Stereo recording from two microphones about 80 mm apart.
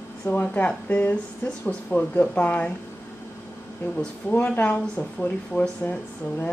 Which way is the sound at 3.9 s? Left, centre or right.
Left.